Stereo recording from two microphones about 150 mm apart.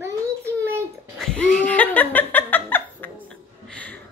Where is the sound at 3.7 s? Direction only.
10° left (ahead or behind).